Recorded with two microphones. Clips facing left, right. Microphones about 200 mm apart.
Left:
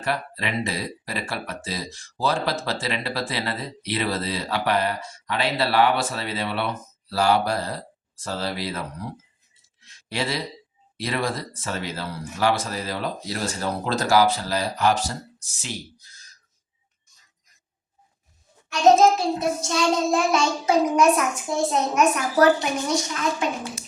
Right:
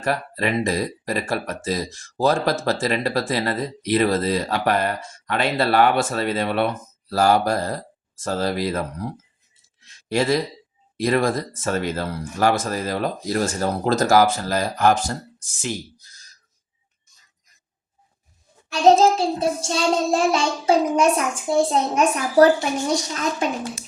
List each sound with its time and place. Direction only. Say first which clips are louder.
0.0 s speech: right 4 dB; 45° right (ahead or behind)
10.1 s speech: right 7 dB; 45° right (ahead or behind)
18.7 s child singing: right 1 dB; 30° right (ahead or behind)